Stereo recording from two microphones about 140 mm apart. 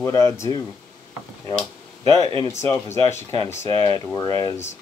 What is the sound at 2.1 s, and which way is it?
Speech, 25° left (ahead or behind).